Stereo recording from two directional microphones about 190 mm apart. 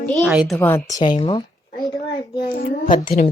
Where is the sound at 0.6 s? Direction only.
15° left (ahead or behind).